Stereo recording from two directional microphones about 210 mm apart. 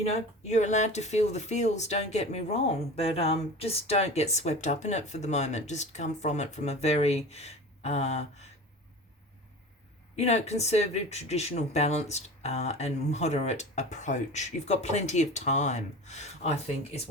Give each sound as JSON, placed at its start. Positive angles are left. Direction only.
{"t": 0.0, "sound": "speech", "side_deg": 30}
{"t": 10.2, "sound": "speech", "side_deg": 30}